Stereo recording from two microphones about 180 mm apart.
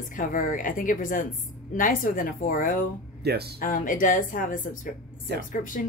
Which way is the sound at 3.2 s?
65° right (ahead or behind).